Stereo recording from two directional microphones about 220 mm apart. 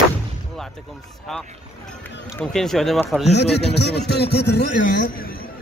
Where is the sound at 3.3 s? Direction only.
50° left (ahead or behind).